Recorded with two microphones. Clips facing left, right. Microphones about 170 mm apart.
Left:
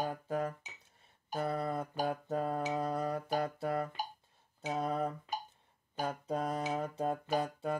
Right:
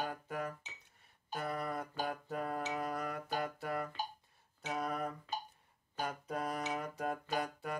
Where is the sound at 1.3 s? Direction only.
30° left (ahead or behind).